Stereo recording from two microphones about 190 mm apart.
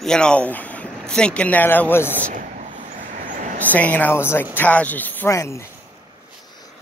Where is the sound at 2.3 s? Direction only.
45° right (ahead or behind).